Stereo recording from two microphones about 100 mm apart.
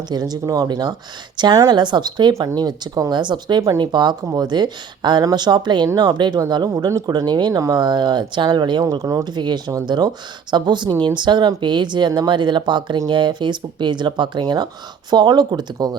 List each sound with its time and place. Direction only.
0.1 s speech: 40° right (ahead or behind)
6.7 s speech: 35° right (ahead or behind)
7.1 s speech: 45° right (ahead or behind)
8.8 s speech: 35° right (ahead or behind)
9.2 s speech: 45° right (ahead or behind)